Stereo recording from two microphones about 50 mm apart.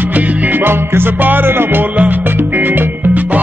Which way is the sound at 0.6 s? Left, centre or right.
Right.